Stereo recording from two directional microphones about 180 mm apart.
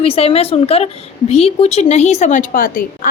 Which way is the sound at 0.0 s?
35° left (ahead or behind).